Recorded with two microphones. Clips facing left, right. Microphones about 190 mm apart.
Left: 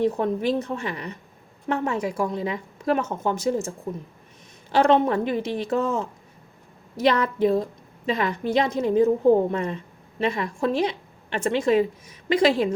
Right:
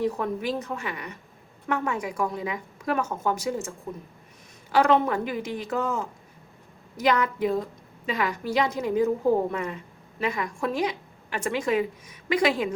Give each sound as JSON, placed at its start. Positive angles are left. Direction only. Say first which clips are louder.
{"t": 0.0, "sound": "a woman's voice", "louder": "left 4 dB", "side_deg": 30}